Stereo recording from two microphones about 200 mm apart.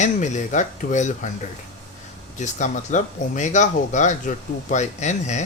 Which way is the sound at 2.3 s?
35° left (ahead or behind).